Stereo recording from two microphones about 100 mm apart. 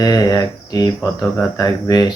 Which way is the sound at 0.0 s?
40° left (ahead or behind).